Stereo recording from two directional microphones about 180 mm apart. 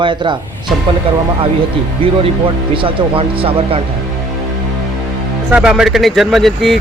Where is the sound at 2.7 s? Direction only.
30° right (ahead or behind).